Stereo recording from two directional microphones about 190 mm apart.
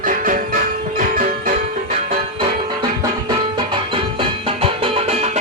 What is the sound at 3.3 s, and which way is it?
Music, 25° right (ahead or behind).